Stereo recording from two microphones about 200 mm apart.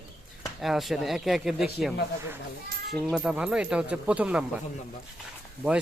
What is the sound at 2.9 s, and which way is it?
Speech, centre (ahead or behind).